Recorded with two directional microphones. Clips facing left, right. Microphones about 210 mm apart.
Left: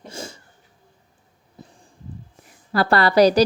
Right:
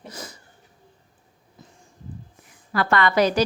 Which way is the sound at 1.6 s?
35° left (ahead or behind).